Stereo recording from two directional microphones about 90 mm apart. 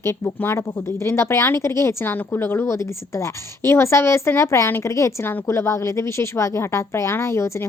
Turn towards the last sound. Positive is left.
turn(degrees=30)  # may be behind; listen again after turning